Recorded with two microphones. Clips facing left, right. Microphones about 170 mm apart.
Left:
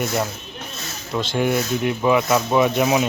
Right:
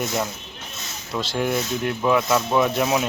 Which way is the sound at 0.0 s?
Centre (ahead or behind).